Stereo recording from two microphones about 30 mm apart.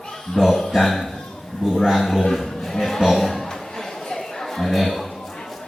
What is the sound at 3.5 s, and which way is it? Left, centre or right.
Chatter, centre.